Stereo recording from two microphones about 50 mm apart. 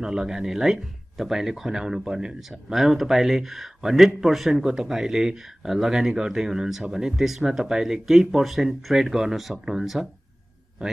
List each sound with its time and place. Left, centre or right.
0.0 s a man's voice: centre